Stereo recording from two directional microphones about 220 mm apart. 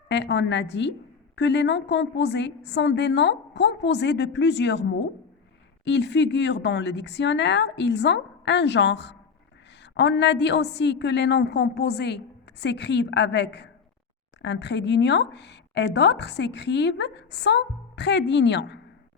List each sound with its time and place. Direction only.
0.1 s a woman's voice: 55° left (ahead or behind)